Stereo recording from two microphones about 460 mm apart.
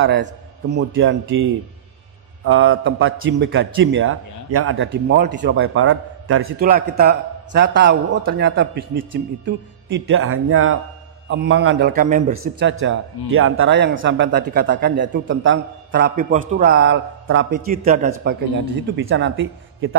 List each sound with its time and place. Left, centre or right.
0.0 s a man's voice: right